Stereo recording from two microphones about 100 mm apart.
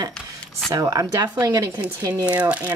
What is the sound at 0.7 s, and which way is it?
Speech, 35° right (ahead or behind).